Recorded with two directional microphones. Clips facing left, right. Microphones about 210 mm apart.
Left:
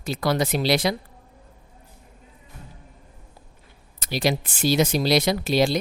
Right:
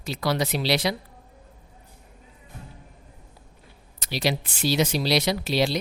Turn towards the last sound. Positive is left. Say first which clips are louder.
# left 3 dB
turn(degrees=50)  # may be behind; listen again after turning